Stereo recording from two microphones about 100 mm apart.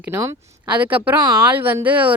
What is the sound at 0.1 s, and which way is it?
Speech, 30° right (ahead or behind).